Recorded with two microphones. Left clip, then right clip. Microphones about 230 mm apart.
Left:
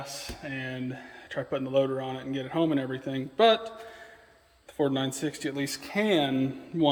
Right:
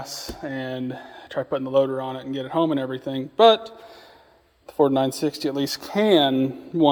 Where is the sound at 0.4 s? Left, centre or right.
Right.